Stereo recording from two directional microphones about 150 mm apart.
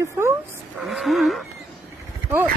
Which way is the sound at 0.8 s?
Centre (ahead or behind).